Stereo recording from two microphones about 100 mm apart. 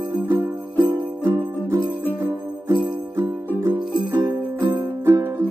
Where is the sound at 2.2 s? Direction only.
20° right (ahead or behind).